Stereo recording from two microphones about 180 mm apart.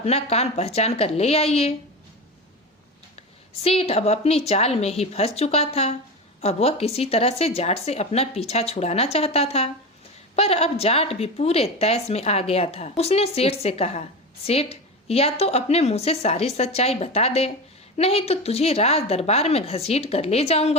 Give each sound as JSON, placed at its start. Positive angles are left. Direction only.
{"t": 0.0, "sound": "speech", "side_deg": 35}
{"t": 3.6, "sound": "speech", "side_deg": 35}